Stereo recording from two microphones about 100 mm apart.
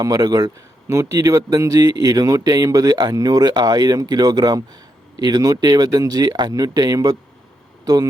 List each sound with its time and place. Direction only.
0.0 s speech: 40° right (ahead or behind)
0.9 s speech: 30° right (ahead or behind)